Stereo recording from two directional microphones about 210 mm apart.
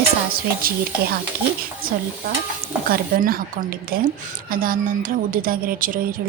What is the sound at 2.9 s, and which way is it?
A woman's voice, 45° right (ahead or behind).